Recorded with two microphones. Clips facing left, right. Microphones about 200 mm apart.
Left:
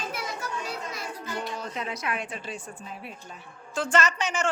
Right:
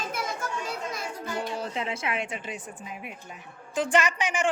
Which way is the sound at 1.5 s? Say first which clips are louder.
Right 2 dB; 25° right (ahead or behind).